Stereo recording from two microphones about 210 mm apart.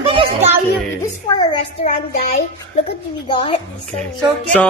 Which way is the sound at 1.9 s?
30° left (ahead or behind).